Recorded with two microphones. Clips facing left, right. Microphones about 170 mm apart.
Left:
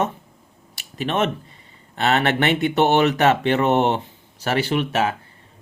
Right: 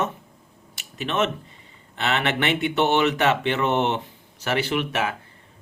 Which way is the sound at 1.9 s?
40° left (ahead or behind).